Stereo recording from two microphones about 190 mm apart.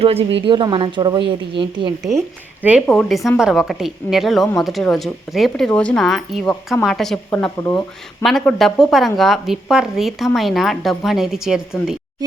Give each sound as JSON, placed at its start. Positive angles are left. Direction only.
{"t": 0.0, "sound": "a woman's voice", "side_deg": -30}
{"t": 2.0, "sound": "a woman's voice", "side_deg": 0}
{"t": 7.6, "sound": "speech", "side_deg": 15}
{"t": 8.2, "sound": "a woman's voice", "side_deg": 0}